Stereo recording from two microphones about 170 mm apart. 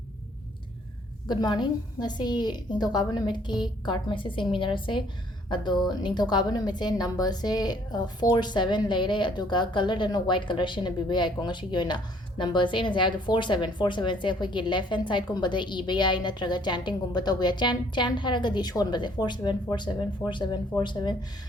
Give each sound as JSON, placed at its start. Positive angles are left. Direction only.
{"t": 1.3, "sound": "speech", "side_deg": 25}